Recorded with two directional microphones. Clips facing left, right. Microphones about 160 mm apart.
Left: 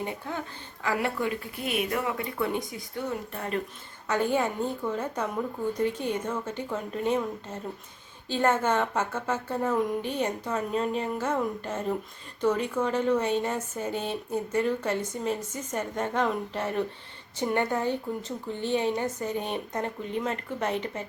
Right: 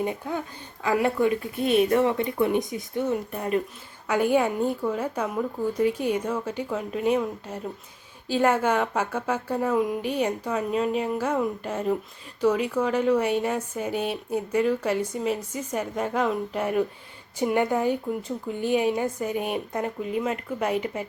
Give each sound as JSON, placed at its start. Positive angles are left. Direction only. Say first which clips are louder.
{"t": 0.0, "sound": "a woman's voice", "louder": "right 5 dB", "side_deg": -15}